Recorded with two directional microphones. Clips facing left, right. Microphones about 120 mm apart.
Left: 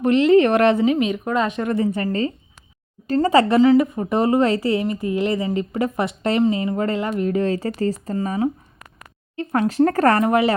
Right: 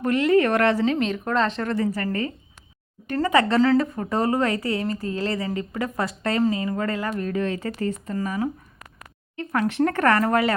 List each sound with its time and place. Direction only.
0.0 s speech: 25° left (ahead or behind)
0.9 s speech: 10° left (ahead or behind)
1.7 s speech: 20° left (ahead or behind)
3.6 s speech: 15° left (ahead or behind)